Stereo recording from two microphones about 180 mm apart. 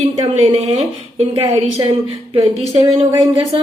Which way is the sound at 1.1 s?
30° right (ahead or behind).